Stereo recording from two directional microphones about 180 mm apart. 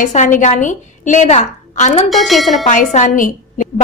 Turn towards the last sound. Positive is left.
turn(degrees=45)  # may be behind; listen again after turning